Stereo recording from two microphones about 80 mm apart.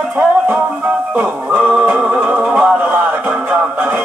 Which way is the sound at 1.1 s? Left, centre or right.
Centre.